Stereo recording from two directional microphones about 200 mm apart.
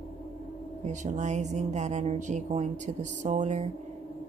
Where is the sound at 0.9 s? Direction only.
35° right (ahead or behind).